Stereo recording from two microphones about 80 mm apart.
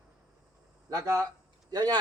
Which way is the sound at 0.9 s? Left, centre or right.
Right.